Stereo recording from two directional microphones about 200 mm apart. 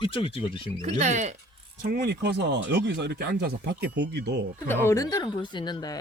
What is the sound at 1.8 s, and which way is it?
Speech, 45° right (ahead or behind).